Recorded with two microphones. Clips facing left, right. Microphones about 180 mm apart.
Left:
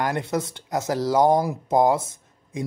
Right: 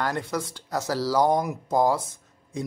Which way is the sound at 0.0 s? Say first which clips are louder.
Left 3 dB; 20° left (ahead or behind).